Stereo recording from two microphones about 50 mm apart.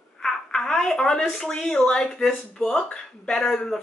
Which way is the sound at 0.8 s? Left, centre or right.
Centre.